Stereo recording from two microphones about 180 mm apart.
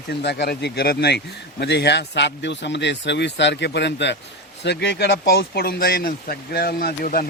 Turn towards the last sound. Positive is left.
turn(degrees=55)  # may be behind; listen again after turning